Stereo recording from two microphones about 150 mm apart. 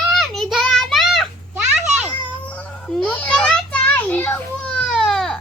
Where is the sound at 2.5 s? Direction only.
10° left (ahead or behind).